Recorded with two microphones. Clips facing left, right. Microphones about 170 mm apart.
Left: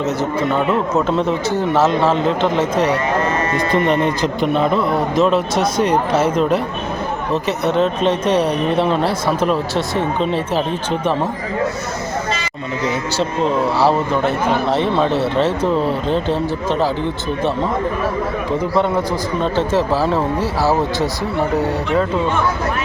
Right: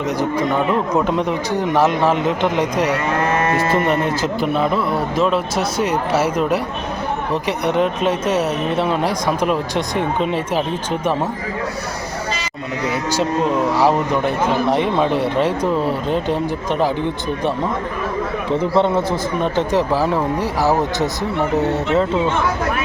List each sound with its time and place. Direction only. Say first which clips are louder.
0.0 s a man's voice: left 1 dB; 10° right (ahead or behind)
13.7 s speech: even; 15° right (ahead or behind)
18.7 s speech: right 1 dB; 25° right (ahead or behind)